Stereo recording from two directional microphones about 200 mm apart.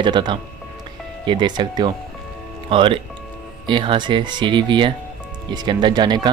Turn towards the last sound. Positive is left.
turn(degrees=-20)  # may be behind; listen again after turning